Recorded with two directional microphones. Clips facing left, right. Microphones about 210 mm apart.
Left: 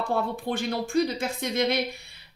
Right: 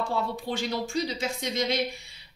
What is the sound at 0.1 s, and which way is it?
Speech, 55° left (ahead or behind).